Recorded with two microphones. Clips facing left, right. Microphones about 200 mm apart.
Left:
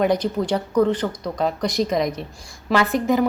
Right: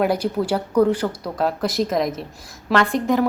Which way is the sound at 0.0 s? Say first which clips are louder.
Even; 5° right (ahead or behind).